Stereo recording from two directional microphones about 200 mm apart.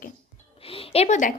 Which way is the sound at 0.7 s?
30° left (ahead or behind).